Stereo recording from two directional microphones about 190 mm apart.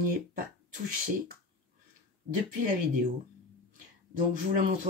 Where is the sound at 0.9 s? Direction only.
50° right (ahead or behind).